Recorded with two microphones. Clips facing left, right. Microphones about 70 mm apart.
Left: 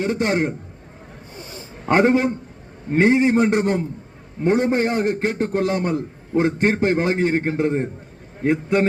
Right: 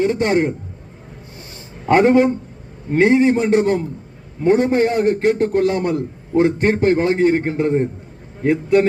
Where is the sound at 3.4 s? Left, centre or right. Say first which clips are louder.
Right 4 dB; left.